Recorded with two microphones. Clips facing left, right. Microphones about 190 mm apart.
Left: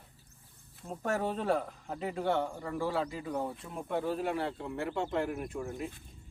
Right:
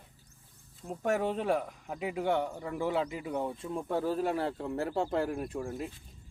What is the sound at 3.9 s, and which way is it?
Speech, 40° right (ahead or behind).